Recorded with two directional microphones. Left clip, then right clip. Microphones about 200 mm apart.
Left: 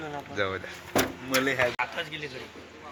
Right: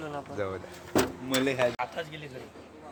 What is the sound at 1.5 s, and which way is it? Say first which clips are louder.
Speech: left 2 dB; 50° right (ahead or behind).